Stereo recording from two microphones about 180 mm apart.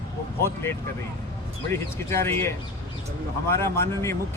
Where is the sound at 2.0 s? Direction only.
15° left (ahead or behind).